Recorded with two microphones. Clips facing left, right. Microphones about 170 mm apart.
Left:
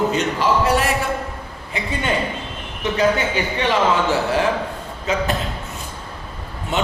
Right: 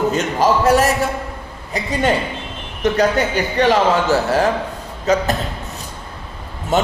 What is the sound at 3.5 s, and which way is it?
Speech, 40° right (ahead or behind).